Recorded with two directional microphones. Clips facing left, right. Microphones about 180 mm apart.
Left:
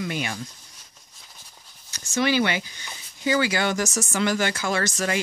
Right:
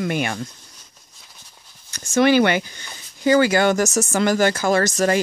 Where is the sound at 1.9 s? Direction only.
50° right (ahead or behind).